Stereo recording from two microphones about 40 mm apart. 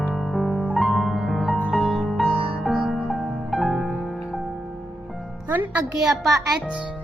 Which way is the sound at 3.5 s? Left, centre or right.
Centre.